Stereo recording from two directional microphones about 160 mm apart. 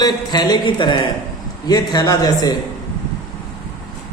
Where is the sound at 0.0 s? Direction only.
25° left (ahead or behind).